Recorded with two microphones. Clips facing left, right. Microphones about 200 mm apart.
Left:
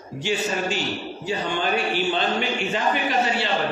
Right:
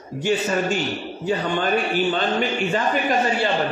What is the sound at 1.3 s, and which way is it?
A man's voice, 55° right (ahead or behind).